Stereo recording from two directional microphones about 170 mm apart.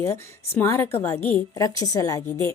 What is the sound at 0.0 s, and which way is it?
A woman's voice, 15° left (ahead or behind).